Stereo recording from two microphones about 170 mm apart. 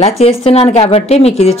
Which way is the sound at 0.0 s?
35° left (ahead or behind).